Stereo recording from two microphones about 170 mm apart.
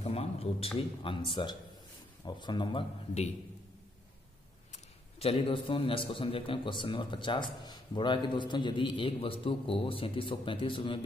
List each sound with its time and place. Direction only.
0.0 s a man's voice: 35° left (ahead or behind)
5.2 s a man's voice: 35° left (ahead or behind)